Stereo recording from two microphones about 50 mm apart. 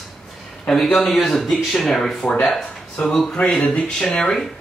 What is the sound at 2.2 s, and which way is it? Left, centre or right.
Speech, left.